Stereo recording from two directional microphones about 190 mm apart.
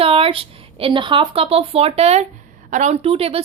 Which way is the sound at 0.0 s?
30° right (ahead or behind).